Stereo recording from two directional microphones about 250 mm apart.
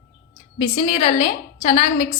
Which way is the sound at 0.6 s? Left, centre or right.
Left.